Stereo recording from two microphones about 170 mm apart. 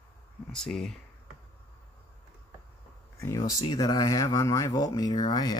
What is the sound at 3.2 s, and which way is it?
Speech, 20° left (ahead or behind).